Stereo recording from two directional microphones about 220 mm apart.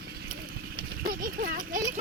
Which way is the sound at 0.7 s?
40° right (ahead or behind).